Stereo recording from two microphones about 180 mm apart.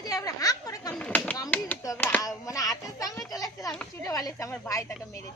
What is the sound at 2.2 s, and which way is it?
A woman's voice, 20° left (ahead or behind).